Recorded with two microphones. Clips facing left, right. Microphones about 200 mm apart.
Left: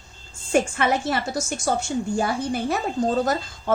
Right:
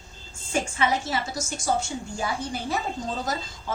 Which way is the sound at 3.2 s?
60° left (ahead or behind).